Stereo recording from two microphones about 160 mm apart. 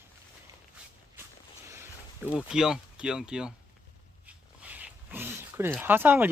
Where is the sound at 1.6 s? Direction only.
15° right (ahead or behind).